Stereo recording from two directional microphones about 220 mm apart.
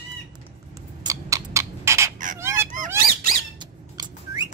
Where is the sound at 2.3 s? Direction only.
10° right (ahead or behind).